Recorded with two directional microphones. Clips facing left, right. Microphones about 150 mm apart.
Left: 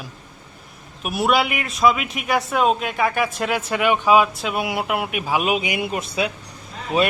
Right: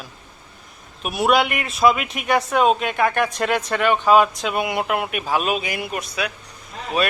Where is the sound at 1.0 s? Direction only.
Centre (ahead or behind); by 7.1 s 25° left (ahead or behind).